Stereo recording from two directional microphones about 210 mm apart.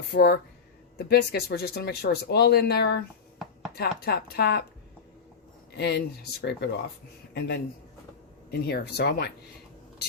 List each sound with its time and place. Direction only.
0.1 s speech: 50° left (ahead or behind)
5.7 s speech: 50° left (ahead or behind)